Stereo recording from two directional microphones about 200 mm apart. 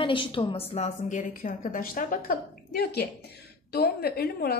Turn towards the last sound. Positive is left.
turn(degrees=50)  # may be behind; listen again after turning